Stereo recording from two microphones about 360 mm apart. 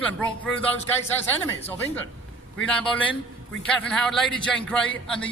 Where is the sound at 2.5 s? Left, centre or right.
Centre.